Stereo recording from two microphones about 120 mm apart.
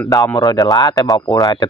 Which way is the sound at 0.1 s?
30° left (ahead or behind).